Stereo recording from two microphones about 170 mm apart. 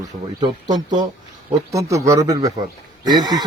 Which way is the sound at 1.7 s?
20° right (ahead or behind).